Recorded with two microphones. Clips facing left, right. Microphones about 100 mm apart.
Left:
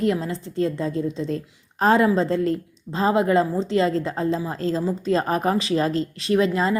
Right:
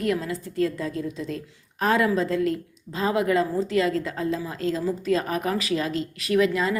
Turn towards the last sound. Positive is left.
turn(degrees=30)  # may be behind; listen again after turning